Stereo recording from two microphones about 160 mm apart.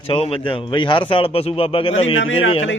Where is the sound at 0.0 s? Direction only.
35° left (ahead or behind).